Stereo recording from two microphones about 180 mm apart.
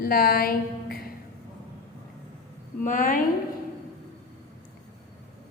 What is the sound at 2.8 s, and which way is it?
Speech, 50° left (ahead or behind).